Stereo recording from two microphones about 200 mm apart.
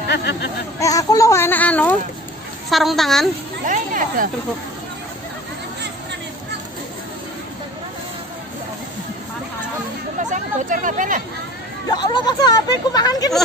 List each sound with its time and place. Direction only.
0.1 s speech: 55° left (ahead or behind)
0.7 s a child's voice: 15° left (ahead or behind); by 3.3 s centre (ahead or behind)
3.6 s speech: 40° right (ahead or behind)
10.1 s speech: 40° right (ahead or behind)
11.9 s speech: 20° left (ahead or behind)